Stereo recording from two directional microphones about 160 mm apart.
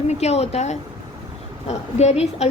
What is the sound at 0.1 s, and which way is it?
A woman's voice, 45° left (ahead or behind).